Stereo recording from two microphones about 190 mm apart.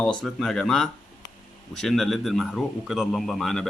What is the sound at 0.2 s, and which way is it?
Speech, centre (ahead or behind).